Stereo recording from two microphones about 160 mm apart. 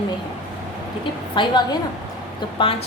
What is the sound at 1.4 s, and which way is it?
A woman's voice, 25° left (ahead or behind).